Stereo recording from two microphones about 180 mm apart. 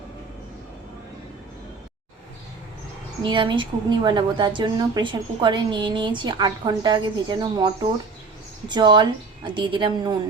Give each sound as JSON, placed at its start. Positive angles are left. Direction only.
{"t": 3.2, "sound": "a woman's voice", "side_deg": -25}